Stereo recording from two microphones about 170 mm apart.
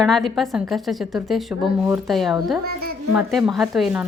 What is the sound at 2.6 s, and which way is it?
Speech, 65° right (ahead or behind).